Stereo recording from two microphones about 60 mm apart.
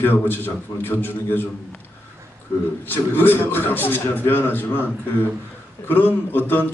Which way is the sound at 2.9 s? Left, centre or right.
Left.